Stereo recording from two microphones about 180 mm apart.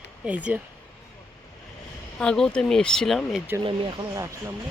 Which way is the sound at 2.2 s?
5° left (ahead or behind).